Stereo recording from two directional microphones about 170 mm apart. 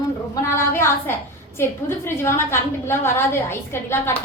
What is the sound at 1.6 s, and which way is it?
A woman's voice, 15° left (ahead or behind).